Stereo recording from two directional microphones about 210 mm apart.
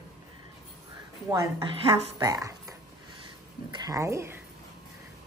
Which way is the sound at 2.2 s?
15° right (ahead or behind).